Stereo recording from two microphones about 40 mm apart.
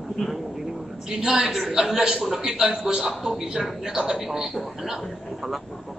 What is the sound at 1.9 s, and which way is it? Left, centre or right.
A man's voice, centre.